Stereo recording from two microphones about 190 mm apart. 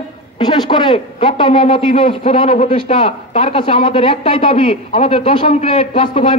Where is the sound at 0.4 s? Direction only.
25° left (ahead or behind).